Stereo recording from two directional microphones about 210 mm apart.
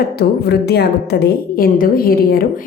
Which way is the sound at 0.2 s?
50° left (ahead or behind).